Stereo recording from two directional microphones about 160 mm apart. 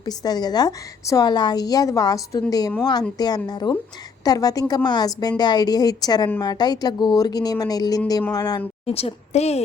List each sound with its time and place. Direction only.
0.0 s a woman's voice: 25° left (ahead or behind)
8.9 s a woman's voice: 40° left (ahead or behind)